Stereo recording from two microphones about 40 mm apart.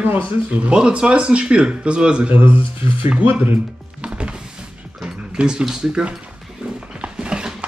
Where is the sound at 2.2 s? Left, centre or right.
Right.